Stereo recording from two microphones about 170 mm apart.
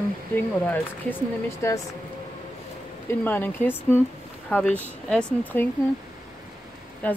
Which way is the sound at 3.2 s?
10° left (ahead or behind).